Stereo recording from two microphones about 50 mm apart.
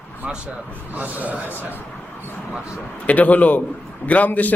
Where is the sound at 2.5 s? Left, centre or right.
Right.